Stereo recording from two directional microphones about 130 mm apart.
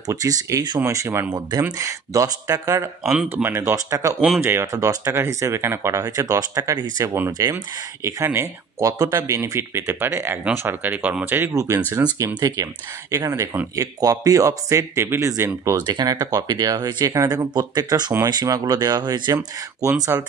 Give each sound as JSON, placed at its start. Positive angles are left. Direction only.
{"t": 0.0, "sound": "speech", "side_deg": -25}
{"t": 3.1, "sound": "speech", "side_deg": -5}
{"t": 3.4, "sound": "speech", "side_deg": -20}
{"t": 20.1, "sound": "speech", "side_deg": -20}